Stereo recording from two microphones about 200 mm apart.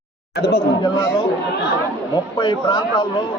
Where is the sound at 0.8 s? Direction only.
20° left (ahead or behind).